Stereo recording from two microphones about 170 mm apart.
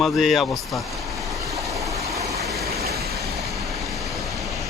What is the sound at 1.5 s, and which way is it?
Vehicle, 20° right (ahead or behind).